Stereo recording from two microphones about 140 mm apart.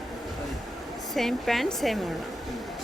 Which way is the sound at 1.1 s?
Centre (ahead or behind).